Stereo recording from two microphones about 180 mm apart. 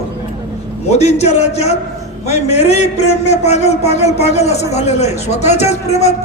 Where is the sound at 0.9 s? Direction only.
35° left (ahead or behind).